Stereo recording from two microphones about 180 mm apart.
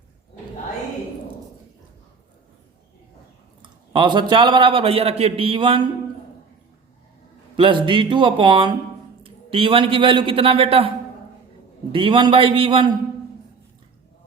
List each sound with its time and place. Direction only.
3.6 s a man's voice: 25° right (ahead or behind)
7.5 s a man's voice: 25° right (ahead or behind)
11.9 s a man's voice: 30° right (ahead or behind)